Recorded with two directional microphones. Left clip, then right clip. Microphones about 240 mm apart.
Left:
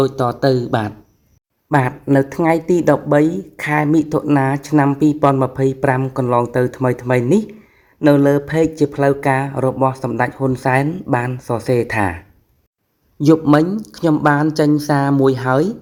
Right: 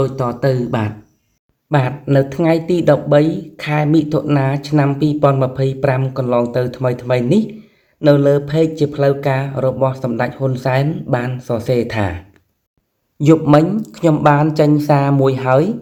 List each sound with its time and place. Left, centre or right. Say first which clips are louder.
0.0 s speech: left 2 dB; left
2.3 s speech: even; left
13.1 s a man's voice: right 1 dB; left
14.8 s speech: right 1 dB; left